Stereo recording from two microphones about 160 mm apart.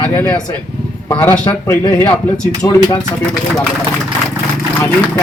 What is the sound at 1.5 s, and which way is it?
Speech, 25° left (ahead or behind).